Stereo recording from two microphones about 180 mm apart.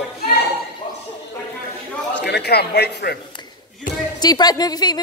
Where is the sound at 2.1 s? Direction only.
70° left (ahead or behind).